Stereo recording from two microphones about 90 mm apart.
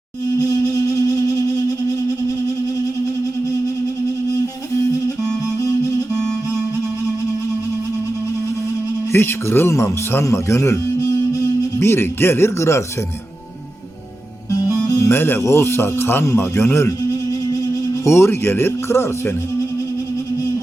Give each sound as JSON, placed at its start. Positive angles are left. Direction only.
{"t": 0.9, "sound": "music", "side_deg": 40}
{"t": 9.1, "sound": "speech", "side_deg": 25}
{"t": 14.8, "sound": "speech", "side_deg": 30}
{"t": 18.0, "sound": "speech", "side_deg": 30}